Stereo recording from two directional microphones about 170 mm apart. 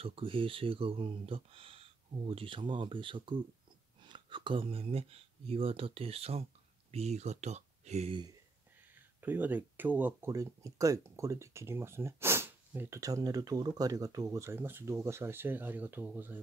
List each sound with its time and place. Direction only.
0.0 s speech: 30° right (ahead or behind)
8.9 s speech: 10° right (ahead or behind)